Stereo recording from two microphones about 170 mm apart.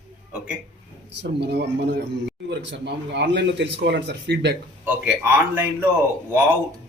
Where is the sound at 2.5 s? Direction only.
90° right.